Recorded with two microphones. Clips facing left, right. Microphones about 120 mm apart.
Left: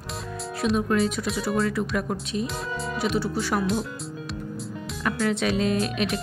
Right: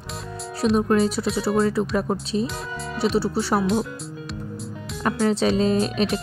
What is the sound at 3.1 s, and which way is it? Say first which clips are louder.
Speech: right 5 dB; 30° right (ahead or behind).